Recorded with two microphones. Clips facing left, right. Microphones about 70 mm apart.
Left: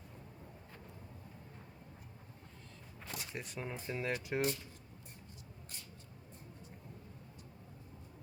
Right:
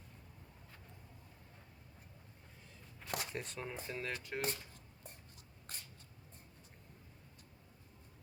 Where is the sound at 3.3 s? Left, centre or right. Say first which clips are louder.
Left 1 dB; centre.